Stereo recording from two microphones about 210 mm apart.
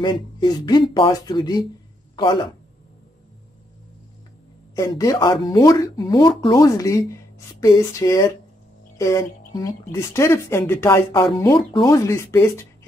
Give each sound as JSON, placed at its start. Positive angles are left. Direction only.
{"t": 0.0, "sound": "speech", "side_deg": 20}
{"t": 4.7, "sound": "speech", "side_deg": 15}